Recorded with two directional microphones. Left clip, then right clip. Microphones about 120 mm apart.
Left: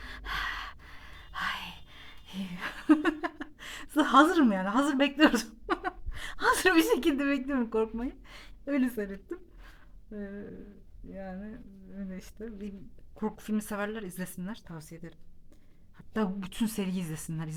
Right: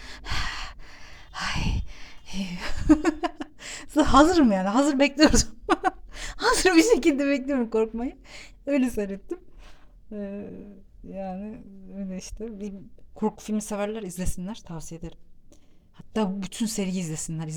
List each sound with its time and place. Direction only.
0.0 s gasp: 30° right (ahead or behind)
6.1 s a woman's voice: 35° right (ahead or behind)
16.0 s speech: 30° right (ahead or behind)